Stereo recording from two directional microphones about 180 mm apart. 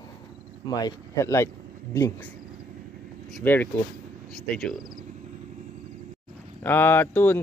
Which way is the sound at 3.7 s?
15° left (ahead or behind).